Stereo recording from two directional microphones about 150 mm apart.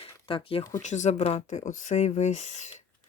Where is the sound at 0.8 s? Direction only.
50° left (ahead or behind).